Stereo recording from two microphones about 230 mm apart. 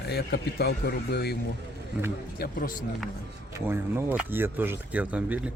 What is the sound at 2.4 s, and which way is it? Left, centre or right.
Speech, left.